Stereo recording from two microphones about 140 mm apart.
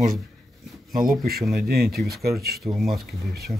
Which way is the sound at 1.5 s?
90° right.